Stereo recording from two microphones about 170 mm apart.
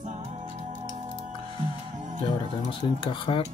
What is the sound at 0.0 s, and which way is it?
Music, 45° right (ahead or behind).